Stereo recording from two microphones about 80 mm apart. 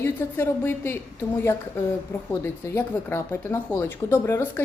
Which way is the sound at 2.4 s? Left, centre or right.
Left.